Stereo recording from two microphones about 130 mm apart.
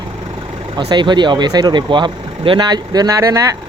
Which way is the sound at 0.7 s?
35° right (ahead or behind).